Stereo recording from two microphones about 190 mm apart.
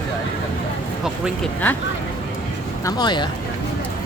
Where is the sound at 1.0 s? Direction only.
Centre (ahead or behind).